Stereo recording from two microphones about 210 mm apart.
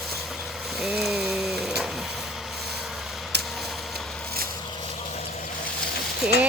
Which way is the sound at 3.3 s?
50° right (ahead or behind).